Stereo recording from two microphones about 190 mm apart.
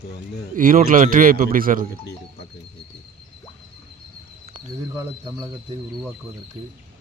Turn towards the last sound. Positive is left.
turn(degrees=-10)  # may be behind; listen again after turning